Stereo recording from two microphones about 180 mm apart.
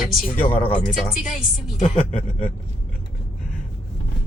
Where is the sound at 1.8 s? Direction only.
40° left (ahead or behind).